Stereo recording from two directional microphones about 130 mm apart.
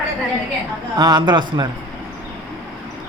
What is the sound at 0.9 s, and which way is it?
Speech, 30° right (ahead or behind).